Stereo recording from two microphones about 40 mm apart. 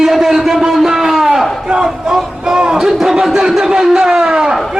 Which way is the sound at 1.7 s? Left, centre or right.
Centre.